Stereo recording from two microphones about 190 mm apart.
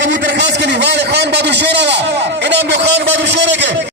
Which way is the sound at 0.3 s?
65° right (ahead or behind).